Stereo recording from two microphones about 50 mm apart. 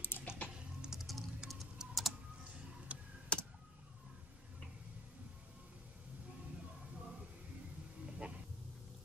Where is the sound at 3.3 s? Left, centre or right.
Left.